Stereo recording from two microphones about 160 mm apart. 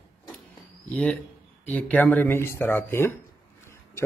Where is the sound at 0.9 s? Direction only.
10° left (ahead or behind).